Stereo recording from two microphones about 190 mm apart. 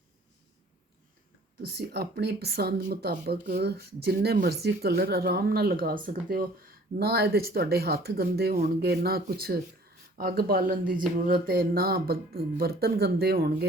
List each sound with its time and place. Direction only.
1.6 s speech: 60° right (ahead or behind)